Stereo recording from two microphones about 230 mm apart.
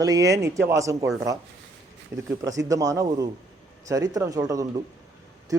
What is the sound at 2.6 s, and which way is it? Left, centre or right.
A man's voice, centre.